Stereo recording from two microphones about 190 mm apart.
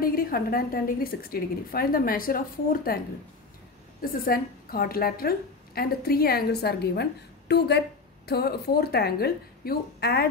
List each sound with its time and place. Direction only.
0.0 s a woman's voice: 50° left (ahead or behind)
4.0 s a woman's voice: 50° left (ahead or behind)